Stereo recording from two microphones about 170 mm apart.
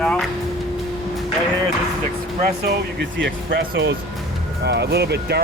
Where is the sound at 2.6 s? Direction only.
90° right.